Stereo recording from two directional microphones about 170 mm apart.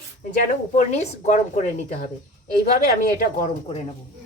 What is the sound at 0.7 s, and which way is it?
Speech, 45° left (ahead or behind).